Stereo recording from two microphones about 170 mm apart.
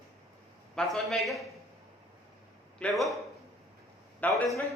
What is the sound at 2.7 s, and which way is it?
Speech, 5° left (ahead or behind).